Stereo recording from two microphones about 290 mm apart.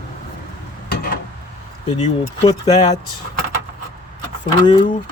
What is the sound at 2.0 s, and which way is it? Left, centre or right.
Speech, left.